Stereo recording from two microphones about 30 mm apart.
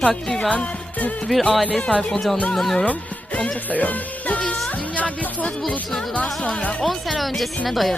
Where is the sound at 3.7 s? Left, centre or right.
Left.